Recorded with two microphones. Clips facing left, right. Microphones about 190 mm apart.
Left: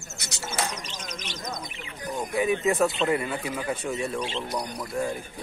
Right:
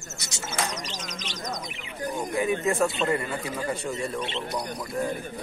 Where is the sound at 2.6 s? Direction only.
Centre (ahead or behind).